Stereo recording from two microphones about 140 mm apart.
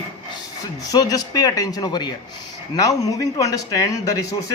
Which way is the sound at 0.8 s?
25° left (ahead or behind).